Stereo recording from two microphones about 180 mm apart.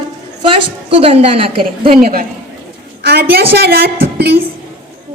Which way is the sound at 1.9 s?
55° right (ahead or behind).